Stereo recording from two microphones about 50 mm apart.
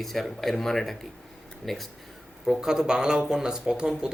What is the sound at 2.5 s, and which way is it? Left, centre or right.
Speech, centre.